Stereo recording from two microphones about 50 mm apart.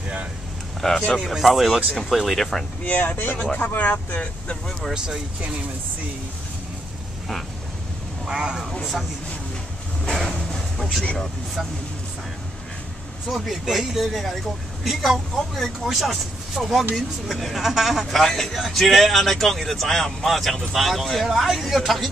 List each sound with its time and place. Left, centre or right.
0.7 s speech: centre
1.2 s speech: centre
2.8 s speech: left
4.9 s speech: centre
8.3 s speech: centre
10.0 s a sound: centre
13.3 s speech: centre